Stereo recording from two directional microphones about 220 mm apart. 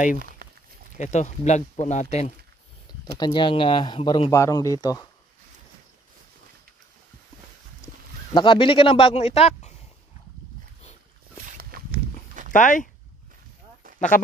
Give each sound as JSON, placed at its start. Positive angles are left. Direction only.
{"t": 0.9, "sound": "speech", "side_deg": 35}
{"t": 3.2, "sound": "speech", "side_deg": 20}
{"t": 8.3, "sound": "speech", "side_deg": 20}
{"t": 11.4, "sound": "a sound", "side_deg": -40}
{"t": 12.4, "sound": "speech", "side_deg": 35}
{"t": 13.9, "sound": "speech", "side_deg": 35}